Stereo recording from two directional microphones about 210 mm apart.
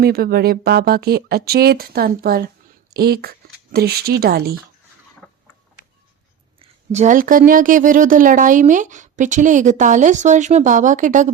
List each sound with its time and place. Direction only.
0.0 s speech: 45° right (ahead or behind)
6.6 s a woman's voice: 35° right (ahead or behind)